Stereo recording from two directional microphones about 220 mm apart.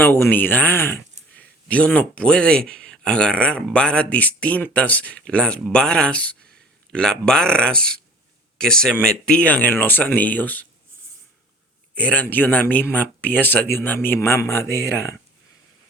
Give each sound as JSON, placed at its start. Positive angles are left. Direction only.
{"t": 0.0, "sound": "speech", "side_deg": 10}
{"t": 11.9, "sound": "speech", "side_deg": 5}